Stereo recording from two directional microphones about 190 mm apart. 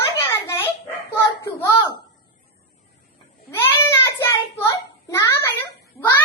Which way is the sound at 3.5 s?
15° left (ahead or behind).